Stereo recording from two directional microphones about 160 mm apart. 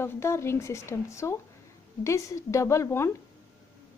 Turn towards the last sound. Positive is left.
turn(degrees=15)  # may be behind; listen again after turning